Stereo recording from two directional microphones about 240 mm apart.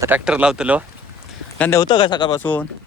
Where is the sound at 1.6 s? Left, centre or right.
Centre.